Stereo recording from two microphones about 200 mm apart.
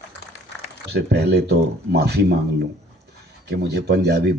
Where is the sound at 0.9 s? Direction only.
55° right (ahead or behind).